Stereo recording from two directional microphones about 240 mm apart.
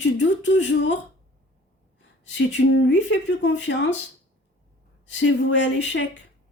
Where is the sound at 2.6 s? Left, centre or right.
Left.